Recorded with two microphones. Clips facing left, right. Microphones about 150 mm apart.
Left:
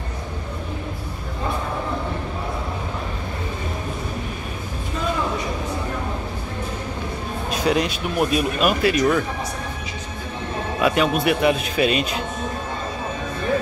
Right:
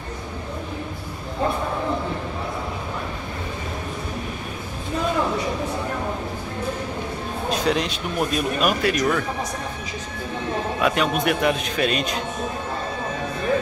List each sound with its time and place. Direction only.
7.5 s speech: 5° left (ahead or behind)
10.8 s speech: 5° left (ahead or behind)